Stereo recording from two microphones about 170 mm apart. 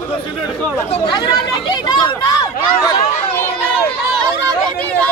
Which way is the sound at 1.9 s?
25° left (ahead or behind).